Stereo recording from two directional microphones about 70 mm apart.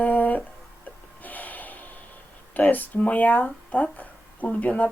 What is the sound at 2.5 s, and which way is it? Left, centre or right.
Speech, left.